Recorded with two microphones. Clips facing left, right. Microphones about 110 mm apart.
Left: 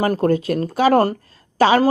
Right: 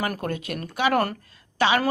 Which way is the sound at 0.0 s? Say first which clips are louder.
Left 11 dB; 30° left (ahead or behind).